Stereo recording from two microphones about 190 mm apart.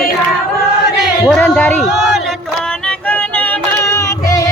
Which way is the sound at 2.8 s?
5° left (ahead or behind).